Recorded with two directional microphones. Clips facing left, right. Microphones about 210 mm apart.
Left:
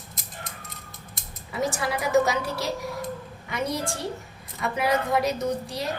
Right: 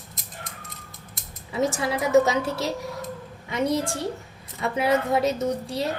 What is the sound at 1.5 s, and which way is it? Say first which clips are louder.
A woman's voice: right 3 dB; 20° right (ahead or behind).